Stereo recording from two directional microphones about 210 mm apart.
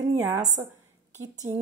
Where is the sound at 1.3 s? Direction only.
35° right (ahead or behind).